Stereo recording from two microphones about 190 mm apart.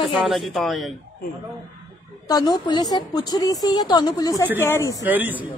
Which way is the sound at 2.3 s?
20° left (ahead or behind).